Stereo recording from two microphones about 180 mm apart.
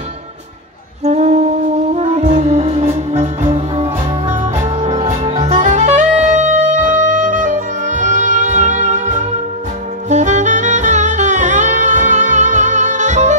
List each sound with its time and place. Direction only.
1.0 s music: 40° right (ahead or behind)
10.0 s saxophone: 40° right (ahead or behind)